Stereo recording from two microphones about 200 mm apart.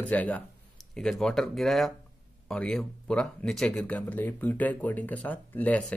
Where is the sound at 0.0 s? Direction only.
5° left (ahead or behind).